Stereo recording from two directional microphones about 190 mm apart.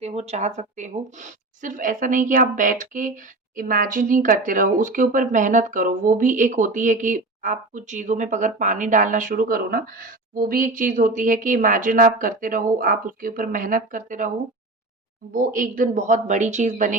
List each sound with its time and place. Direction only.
0.0 s speech: 35° right (ahead or behind)
15.3 s speech: 45° right (ahead or behind)